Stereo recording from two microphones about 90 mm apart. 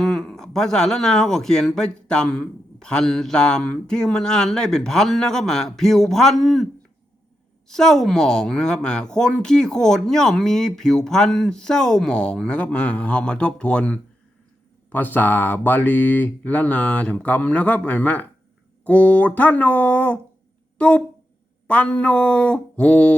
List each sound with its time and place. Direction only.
0.0 s speech: 5° left (ahead or behind)
7.7 s speech: 5° left (ahead or behind)